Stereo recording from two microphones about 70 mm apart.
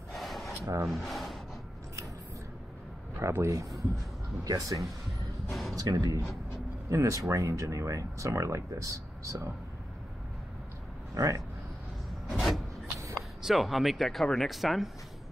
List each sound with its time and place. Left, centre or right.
0.1 s rub: centre
0.8 s speech: centre
3.2 s speech: right
5.5 s music: centre
5.8 s speech: right
6.9 s speech: right
11.1 s speech: right
12.3 s a sound: centre
13.4 s speech: centre